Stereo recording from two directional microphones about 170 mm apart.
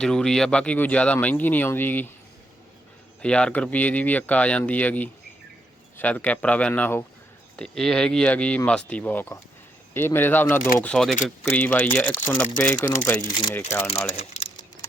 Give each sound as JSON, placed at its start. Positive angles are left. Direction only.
{"t": 0.0, "sound": "speech", "side_deg": 5}
{"t": 3.2, "sound": "speech", "side_deg": 5}
{"t": 14.1, "sound": "speech", "side_deg": 40}